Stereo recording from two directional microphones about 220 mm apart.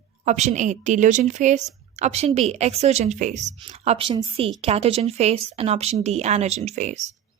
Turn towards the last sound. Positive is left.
turn(degrees=-30)  # may be behind; listen again after turning